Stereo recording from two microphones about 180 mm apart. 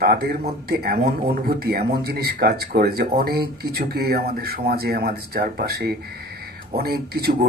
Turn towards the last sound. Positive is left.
turn(degrees=-60)  # may be behind; listen again after turning